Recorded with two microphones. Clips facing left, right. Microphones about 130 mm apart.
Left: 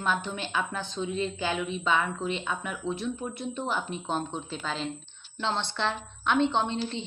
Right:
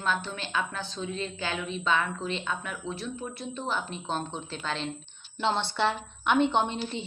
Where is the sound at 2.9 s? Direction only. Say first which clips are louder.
Left 4 dB; 20° left (ahead or behind); by 6.5 s 5° right (ahead or behind).